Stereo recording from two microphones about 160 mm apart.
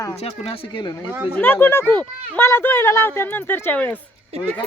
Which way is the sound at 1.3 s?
10° left (ahead or behind).